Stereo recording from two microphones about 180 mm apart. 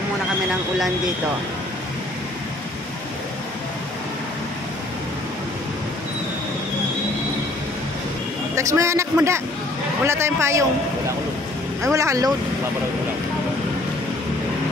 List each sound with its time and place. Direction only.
8.5 s a man's voice: 15° right (ahead or behind)
11.9 s a man's voice: 15° right (ahead or behind)